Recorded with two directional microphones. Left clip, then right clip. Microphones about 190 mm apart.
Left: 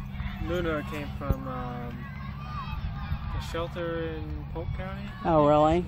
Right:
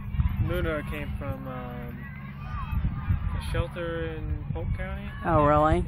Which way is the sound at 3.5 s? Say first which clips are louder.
Even; 50° left (ahead or behind).